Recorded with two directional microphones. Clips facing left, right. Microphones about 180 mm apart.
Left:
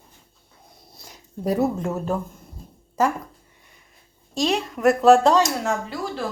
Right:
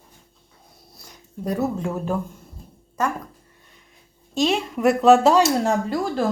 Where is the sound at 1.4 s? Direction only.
25° left (ahead or behind).